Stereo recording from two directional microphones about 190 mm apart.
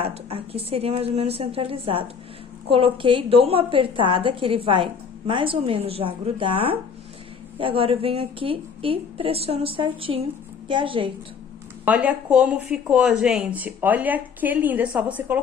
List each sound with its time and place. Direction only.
0.0 s a woman's voice: 30° right (ahead or behind)
11.8 s speech: 5° right (ahead or behind)